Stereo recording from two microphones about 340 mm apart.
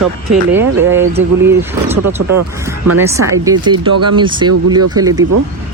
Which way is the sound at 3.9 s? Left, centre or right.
Right.